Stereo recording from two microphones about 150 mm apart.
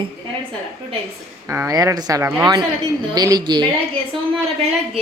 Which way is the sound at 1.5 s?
20° right (ahead or behind).